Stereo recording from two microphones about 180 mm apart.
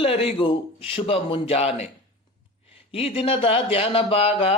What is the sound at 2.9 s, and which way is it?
Speech, 35° left (ahead or behind).